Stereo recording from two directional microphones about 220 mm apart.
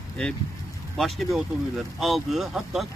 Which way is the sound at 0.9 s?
Centre (ahead or behind).